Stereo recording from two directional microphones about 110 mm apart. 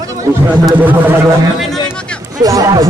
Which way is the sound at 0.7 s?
15° right (ahead or behind).